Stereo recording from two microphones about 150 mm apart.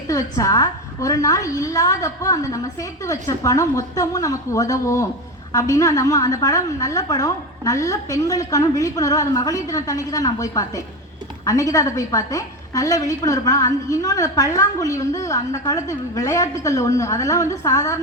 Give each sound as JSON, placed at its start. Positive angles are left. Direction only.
{"t": 0.1, "sound": "a woman's voice", "side_deg": 20}